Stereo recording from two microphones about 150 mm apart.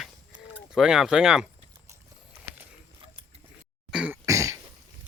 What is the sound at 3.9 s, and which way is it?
Throat clearing, 10° right (ahead or behind).